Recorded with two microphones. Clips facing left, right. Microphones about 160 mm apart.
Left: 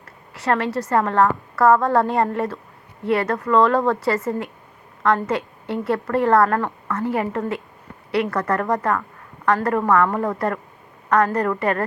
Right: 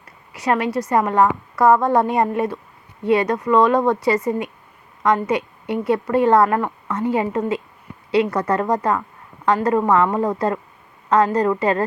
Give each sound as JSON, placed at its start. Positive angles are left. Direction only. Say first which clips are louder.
{"t": 0.0, "sound": "a woman's voice", "louder": "right 2 dB", "side_deg": -15}